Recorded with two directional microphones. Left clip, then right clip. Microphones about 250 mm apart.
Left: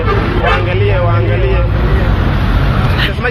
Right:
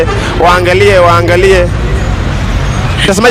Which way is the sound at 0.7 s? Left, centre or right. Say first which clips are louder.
Right 10 dB; right.